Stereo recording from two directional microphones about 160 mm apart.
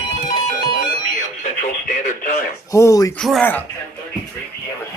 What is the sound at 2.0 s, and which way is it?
Radio, 60° left (ahead or behind).